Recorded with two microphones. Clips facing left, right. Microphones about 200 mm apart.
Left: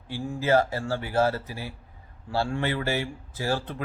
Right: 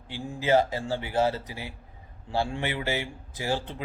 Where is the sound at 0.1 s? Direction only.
20° right (ahead or behind).